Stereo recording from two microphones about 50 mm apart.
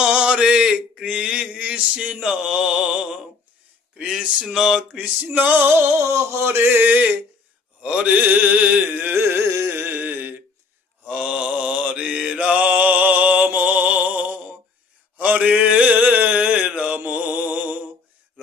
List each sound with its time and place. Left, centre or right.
0.0 s mantra: centre
1.0 s a sound: centre
2.2 s mantra: centre
4.9 s carnatic music: right
6.0 s mantra: right
7.8 s mantra: centre
8.0 s carnatic music: right
9.1 s carnatic music: right
11.0 s mantra: right
15.2 s a sound: right
17.1 s music: right